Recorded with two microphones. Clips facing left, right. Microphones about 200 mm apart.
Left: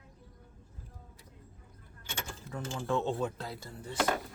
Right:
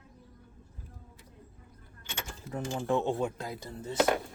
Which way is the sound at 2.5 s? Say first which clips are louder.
Right 3 dB; 20° right (ahead or behind).